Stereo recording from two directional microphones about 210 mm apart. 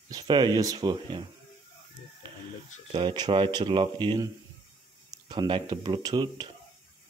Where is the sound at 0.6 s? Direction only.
20° right (ahead or behind).